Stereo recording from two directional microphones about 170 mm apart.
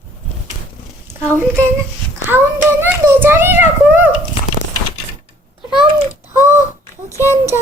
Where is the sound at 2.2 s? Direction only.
15° right (ahead or behind).